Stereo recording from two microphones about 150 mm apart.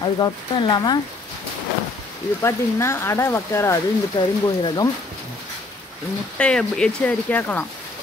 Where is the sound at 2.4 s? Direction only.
15° left (ahead or behind).